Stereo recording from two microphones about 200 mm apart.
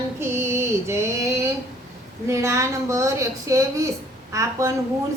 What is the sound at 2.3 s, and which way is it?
A woman's voice, 15° right (ahead or behind).